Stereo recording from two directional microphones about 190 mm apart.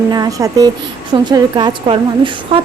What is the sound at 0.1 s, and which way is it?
A woman's voice, 20° right (ahead or behind).